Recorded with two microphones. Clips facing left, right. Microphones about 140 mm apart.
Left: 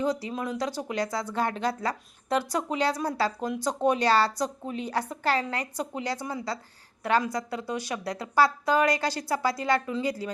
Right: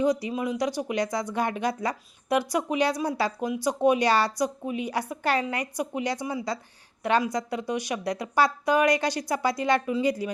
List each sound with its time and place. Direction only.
0.0 s a woman's voice: 15° right (ahead or behind)